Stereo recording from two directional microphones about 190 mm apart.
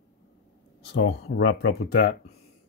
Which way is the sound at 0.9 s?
60° left (ahead or behind).